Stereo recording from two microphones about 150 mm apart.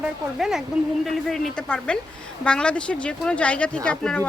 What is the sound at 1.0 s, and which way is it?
A woman's voice, 5° left (ahead or behind).